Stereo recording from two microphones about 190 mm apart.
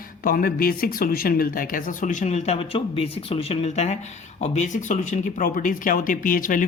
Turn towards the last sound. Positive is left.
turn(degrees=45)  # may be behind; listen again after turning